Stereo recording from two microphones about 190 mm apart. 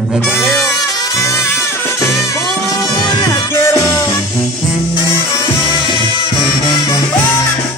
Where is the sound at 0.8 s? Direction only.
20° left (ahead or behind).